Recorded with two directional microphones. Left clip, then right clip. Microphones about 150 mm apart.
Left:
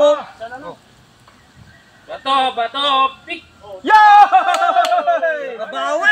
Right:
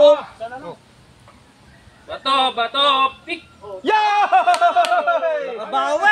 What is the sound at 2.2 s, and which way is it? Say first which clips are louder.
Speech: left 1 dB; 5° right (ahead or behind).